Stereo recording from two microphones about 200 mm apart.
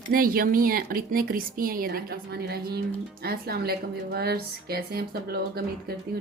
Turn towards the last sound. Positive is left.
turn(degrees=-50)  # may be behind; listen again after turning